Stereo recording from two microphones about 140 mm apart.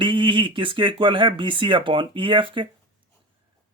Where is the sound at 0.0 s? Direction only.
35° right (ahead or behind).